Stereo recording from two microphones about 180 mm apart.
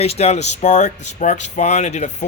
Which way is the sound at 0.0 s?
35° left (ahead or behind).